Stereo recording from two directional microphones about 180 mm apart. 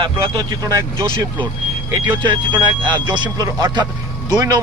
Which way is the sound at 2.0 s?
25° right (ahead or behind).